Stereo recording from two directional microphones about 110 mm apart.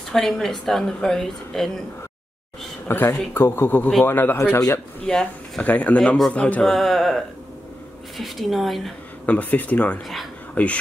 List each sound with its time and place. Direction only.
0.1 s a woman's voice: 5° left (ahead or behind)
2.9 s speech: 20° left (ahead or behind)
6.7 s a woman's voice: centre (ahead or behind)
8.2 s a woman's voice: centre (ahead or behind)
9.2 s speech: 15° left (ahead or behind)